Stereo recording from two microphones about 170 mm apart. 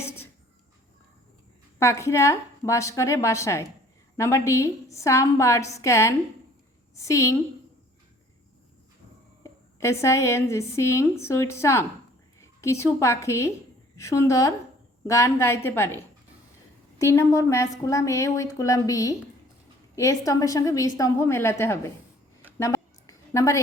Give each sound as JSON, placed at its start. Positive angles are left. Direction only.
{"t": 1.8, "sound": "a woman's voice", "side_deg": 15}
{"t": 9.4, "sound": "a woman's voice", "side_deg": 15}
{"t": 17.0, "sound": "a woman's voice", "side_deg": 15}
{"t": 22.5, "sound": "a sound", "side_deg": 20}